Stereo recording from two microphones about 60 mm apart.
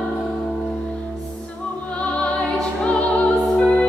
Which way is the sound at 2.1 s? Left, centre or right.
Centre.